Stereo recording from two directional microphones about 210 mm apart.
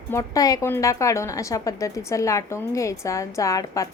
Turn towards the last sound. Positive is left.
turn(degrees=15)  # may be behind; listen again after turning